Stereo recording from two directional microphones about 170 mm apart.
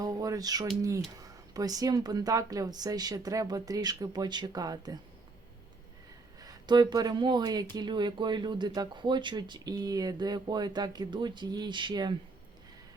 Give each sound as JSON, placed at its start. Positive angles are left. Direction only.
{"t": 0.0, "sound": "speech", "side_deg": -20}
{"t": 6.4, "sound": "speech", "side_deg": -25}